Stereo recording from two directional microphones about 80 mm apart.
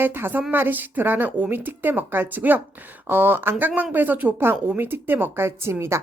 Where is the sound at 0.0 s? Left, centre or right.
Right.